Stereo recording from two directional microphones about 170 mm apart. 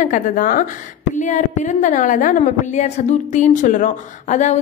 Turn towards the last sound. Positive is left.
turn(degrees=45)  # may be behind; listen again after turning